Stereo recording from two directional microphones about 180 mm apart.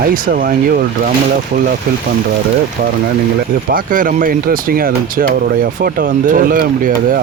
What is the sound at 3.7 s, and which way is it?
Speech, 50° right (ahead or behind).